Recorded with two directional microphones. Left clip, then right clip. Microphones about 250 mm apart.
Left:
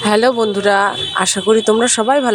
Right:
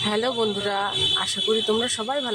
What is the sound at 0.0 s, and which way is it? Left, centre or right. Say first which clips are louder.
Speech: left 10 dB; left.